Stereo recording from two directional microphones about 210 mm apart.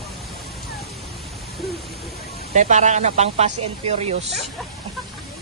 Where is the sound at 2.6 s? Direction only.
35° right (ahead or behind).